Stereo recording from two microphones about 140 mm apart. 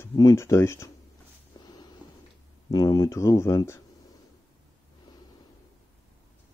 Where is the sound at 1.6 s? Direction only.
25° left (ahead or behind).